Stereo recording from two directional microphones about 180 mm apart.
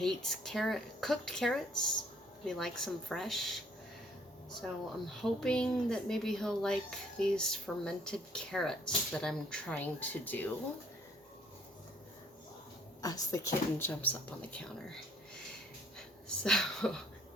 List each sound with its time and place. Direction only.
0.0 s speech: centre (ahead or behind)
4.6 s speech: centre (ahead or behind)
13.0 s speech: 20° left (ahead or behind)
16.0 s a sound: 5° left (ahead or behind)